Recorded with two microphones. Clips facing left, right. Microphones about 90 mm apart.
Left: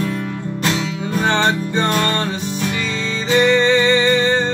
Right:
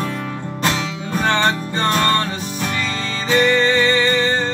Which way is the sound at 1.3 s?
20° left (ahead or behind).